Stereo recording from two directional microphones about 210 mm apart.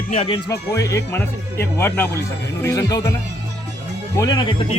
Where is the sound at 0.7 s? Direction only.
15° left (ahead or behind).